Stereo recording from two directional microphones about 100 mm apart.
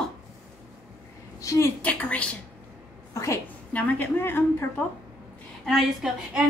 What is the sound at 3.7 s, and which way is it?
Speech, 20° left (ahead or behind).